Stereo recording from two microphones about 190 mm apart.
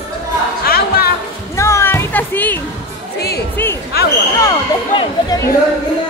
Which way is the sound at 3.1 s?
55° left (ahead or behind).